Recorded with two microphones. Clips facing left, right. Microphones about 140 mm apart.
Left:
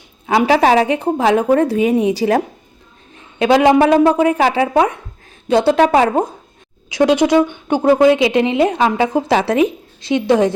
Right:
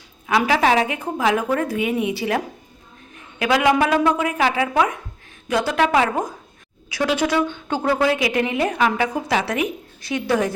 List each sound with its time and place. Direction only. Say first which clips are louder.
0.3 s a woman's voice: left 5 dB; 30° left (ahead or behind)
6.9 s a woman's voice: left 8 dB; 20° left (ahead or behind)